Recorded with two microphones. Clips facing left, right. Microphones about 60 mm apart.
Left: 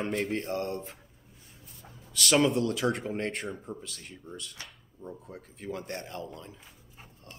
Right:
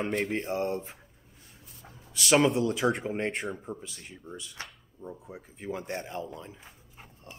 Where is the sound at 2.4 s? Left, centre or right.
Centre.